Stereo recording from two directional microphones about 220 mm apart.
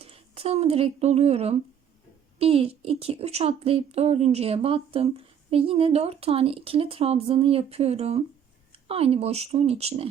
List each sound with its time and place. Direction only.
0.0 s a woman's voice: 25° right (ahead or behind)